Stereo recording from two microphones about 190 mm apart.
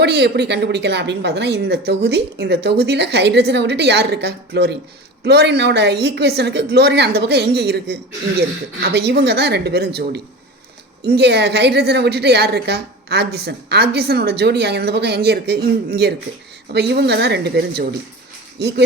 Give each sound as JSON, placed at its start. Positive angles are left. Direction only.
{"t": 0.0, "sound": "a woman's voice", "side_deg": -60}